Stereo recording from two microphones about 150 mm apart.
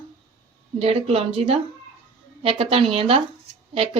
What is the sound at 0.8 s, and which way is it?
A woman's voice, 40° right (ahead or behind).